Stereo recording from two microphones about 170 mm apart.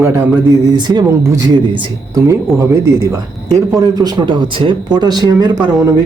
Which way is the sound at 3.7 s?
20° right (ahead or behind).